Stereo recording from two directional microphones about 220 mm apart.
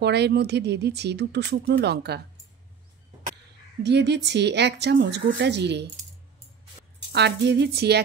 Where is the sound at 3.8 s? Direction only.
50° right (ahead or behind).